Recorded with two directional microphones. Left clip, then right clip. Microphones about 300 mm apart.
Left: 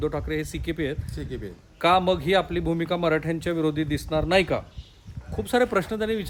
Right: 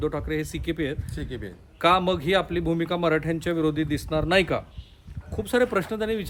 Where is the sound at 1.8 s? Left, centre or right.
Centre.